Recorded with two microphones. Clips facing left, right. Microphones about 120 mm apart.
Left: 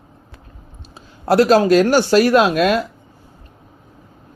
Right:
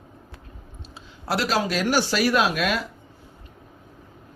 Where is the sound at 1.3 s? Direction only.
50° left (ahead or behind).